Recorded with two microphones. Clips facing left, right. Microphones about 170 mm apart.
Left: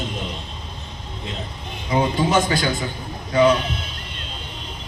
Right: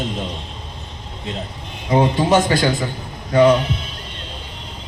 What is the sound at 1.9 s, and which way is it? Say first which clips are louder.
Speech: right 4 dB; 35° right (ahead or behind).